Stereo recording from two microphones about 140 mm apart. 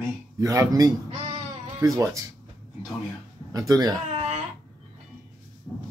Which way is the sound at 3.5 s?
25° right (ahead or behind).